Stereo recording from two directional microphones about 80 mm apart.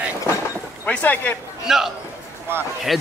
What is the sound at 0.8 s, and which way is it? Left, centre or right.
Speech, centre.